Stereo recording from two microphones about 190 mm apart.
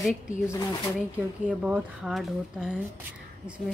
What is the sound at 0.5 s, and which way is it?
Speech, 15° left (ahead or behind).